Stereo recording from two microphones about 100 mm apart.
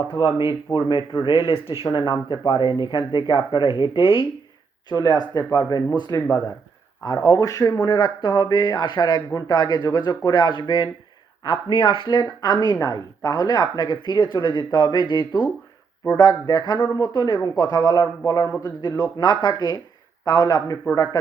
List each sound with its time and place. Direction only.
0.1 s speech: 45° left (ahead or behind)
4.9 s speech: 45° left (ahead or behind)
7.3 s speech: 35° left (ahead or behind)
7.9 s speech: 50° left (ahead or behind); by 21.2 s 35° left (ahead or behind)